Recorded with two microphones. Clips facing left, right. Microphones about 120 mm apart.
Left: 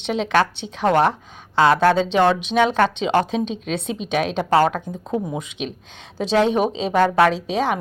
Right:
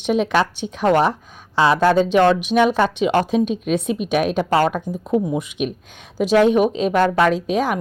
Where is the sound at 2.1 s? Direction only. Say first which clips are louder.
Right 3 dB; 20° left (ahead or behind).